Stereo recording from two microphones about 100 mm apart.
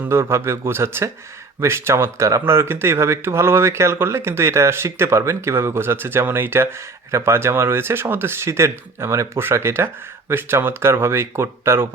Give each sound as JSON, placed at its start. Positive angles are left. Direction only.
{"t": 0.1, "sound": "speech", "side_deg": -25}